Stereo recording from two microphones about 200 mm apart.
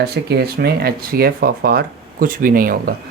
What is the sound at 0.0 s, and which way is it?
Speech, 55° right (ahead or behind).